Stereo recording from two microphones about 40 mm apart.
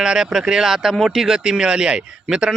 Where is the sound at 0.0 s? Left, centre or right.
Centre.